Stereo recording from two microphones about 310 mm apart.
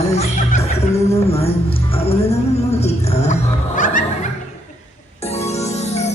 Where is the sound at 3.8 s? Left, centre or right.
Left.